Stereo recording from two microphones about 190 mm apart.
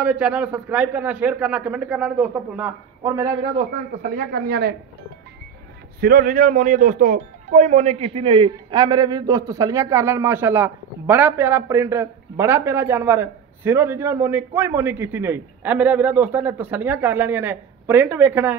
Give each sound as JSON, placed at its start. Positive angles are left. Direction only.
{"t": 0.0, "sound": "speech", "side_deg": -5}
{"t": 4.0, "sound": "speech", "side_deg": -50}
{"t": 5.9, "sound": "speech", "side_deg": -50}